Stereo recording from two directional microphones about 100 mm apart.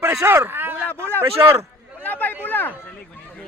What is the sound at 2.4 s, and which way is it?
Speech, 20° left (ahead or behind).